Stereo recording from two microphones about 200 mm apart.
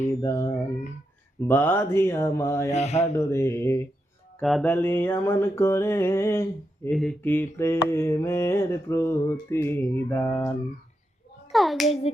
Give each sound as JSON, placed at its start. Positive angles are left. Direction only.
{"t": 0.2, "sound": "mantra", "side_deg": 15}
{"t": 1.5, "sound": "mantra", "side_deg": 10}
{"t": 2.7, "sound": "mantra", "side_deg": 35}
{"t": 3.2, "sound": "mantra", "side_deg": 15}
{"t": 4.4, "sound": "music", "side_deg": 5}
{"t": 4.7, "sound": "mantra", "side_deg": 10}
{"t": 6.9, "sound": "mantra", "side_deg": 0}
{"t": 11.5, "sound": "a child's voice", "side_deg": 0}